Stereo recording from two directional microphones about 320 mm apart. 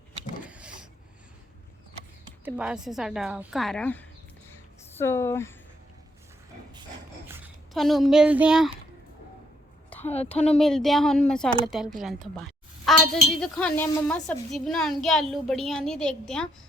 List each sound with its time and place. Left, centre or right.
0.4 s vehicle: centre
2.4 s a woman's voice: centre
7.3 s speech: centre
10.0 s a woman's voice: centre
10.6 s a woman's voice: centre